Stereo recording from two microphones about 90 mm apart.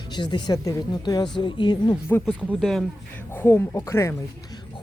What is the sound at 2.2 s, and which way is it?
Speech, centre (ahead or behind).